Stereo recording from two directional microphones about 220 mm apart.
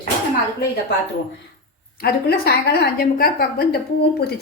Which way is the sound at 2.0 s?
45° left (ahead or behind).